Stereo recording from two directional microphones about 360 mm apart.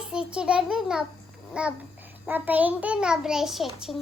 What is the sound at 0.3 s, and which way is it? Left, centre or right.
A child's voice, centre.